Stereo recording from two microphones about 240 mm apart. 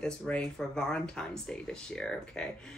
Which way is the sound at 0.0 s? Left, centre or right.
Centre.